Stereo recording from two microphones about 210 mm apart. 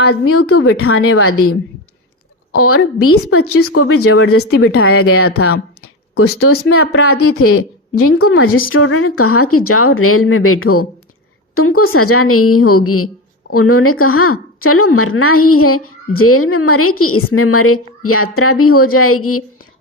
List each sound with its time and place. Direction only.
0.3 s a woman's voice: 90° left
8.7 s a woman's voice: 75° left (ahead or behind)